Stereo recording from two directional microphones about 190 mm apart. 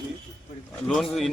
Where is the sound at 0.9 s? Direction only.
Centre (ahead or behind).